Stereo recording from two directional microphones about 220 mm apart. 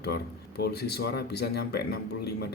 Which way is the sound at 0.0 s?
45° left (ahead or behind).